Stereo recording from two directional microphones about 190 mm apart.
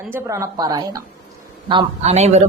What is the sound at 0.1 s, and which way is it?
Mantra, 15° right (ahead or behind).